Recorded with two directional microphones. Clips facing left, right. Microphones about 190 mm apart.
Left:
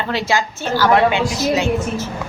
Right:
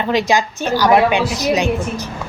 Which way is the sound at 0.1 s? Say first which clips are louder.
Right 4 dB; 15° right (ahead or behind).